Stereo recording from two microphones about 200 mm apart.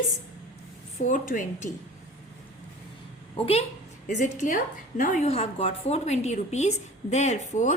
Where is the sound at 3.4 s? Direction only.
30° left (ahead or behind).